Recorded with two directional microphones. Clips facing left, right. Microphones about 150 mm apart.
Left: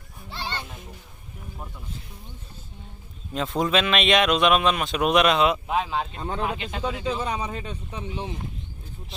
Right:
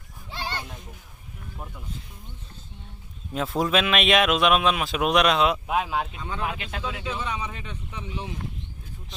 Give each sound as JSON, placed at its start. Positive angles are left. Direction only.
{"t": 0.3, "sound": "a sound", "side_deg": -10}
{"t": 1.5, "sound": "speech", "side_deg": 0}
{"t": 3.3, "sound": "speech", "side_deg": 0}
{"t": 6.1, "sound": "speech", "side_deg": 45}
{"t": 6.4, "sound": "speech", "side_deg": 0}
{"t": 7.1, "sound": "speech", "side_deg": 35}